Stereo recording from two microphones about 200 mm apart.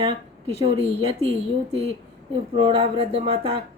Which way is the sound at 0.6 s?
30° right (ahead or behind).